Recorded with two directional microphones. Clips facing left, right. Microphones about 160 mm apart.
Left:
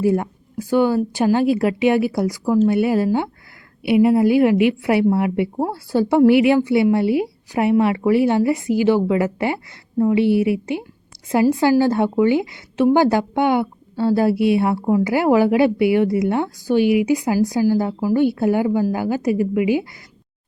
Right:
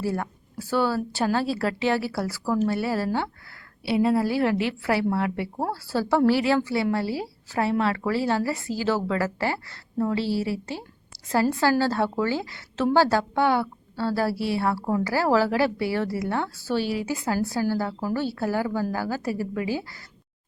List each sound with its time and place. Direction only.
0.0 s a woman's voice: 20° left (ahead or behind)